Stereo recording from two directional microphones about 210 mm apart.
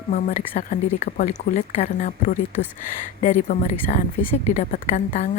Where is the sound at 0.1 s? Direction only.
35° left (ahead or behind).